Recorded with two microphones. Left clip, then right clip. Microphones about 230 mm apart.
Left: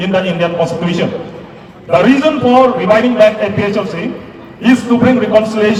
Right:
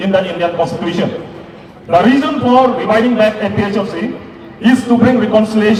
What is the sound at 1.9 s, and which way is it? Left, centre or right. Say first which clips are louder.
A man's voice: left 1 dB; right.